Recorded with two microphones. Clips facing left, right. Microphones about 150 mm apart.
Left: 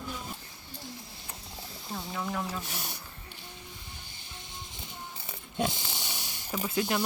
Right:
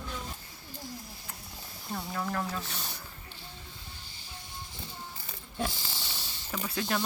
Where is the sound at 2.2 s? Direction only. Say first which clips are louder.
Even; 10° left (ahead or behind).